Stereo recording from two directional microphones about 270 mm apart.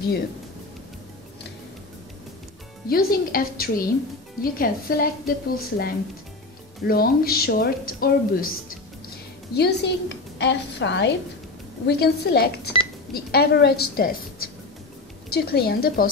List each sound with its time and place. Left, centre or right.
2.9 s a woman's voice: left
9.5 s a woman's voice: left